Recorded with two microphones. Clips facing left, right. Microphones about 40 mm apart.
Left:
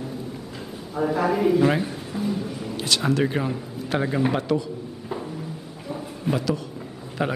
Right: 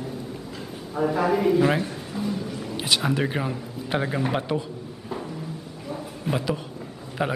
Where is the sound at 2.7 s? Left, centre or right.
Centre.